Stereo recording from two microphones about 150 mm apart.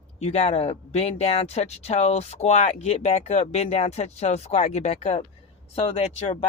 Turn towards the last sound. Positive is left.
turn(degrees=40)  # may be behind; listen again after turning